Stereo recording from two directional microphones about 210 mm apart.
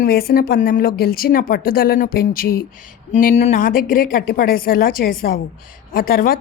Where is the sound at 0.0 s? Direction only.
45° left (ahead or behind).